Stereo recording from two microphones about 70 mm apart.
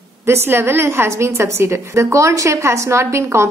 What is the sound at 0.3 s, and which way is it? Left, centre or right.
A woman's voice, right.